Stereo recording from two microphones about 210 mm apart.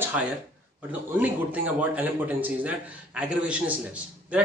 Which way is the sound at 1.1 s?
5° right (ahead or behind).